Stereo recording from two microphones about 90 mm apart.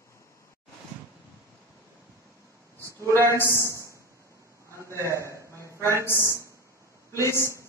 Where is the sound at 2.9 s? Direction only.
30° left (ahead or behind).